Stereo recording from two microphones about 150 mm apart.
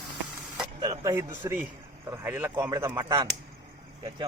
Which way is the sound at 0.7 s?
30° right (ahead or behind).